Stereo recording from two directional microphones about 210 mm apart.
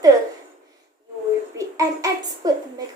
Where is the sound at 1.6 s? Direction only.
15° right (ahead or behind).